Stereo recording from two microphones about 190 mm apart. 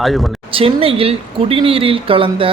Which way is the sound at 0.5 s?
30° right (ahead or behind).